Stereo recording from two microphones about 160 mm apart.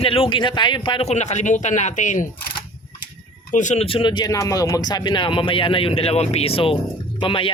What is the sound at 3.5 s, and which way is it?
Speech, 50° left (ahead or behind).